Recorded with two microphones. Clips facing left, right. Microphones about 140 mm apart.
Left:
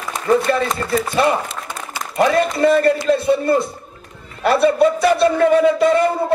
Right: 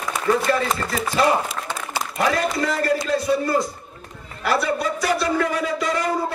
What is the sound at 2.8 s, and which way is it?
A man's voice, 25° left (ahead or behind).